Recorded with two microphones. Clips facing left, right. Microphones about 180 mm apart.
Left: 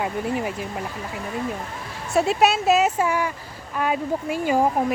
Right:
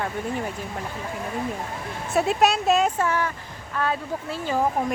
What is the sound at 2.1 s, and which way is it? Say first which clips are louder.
Speech: left 2 dB; centre (ahead or behind).